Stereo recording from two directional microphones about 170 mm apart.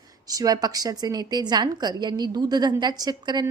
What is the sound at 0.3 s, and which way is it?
A woman's voice, 20° right (ahead or behind).